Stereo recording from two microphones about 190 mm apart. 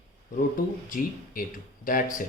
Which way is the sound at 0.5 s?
45° left (ahead or behind).